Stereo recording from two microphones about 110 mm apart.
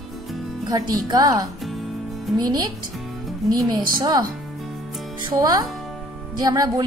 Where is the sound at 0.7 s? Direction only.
35° right (ahead or behind).